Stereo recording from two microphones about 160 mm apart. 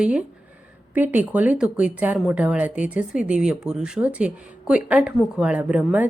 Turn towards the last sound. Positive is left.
turn(degrees=-5)  # may be behind; listen again after turning